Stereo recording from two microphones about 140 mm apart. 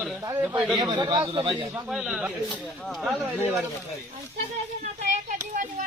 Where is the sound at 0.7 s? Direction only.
30° right (ahead or behind).